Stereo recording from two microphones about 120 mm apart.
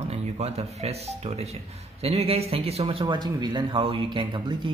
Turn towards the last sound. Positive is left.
turn(degrees=-40)  # may be behind; listen again after turning